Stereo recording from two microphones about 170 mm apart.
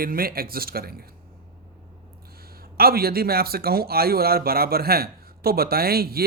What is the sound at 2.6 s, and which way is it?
Speech, 65° right (ahead or behind).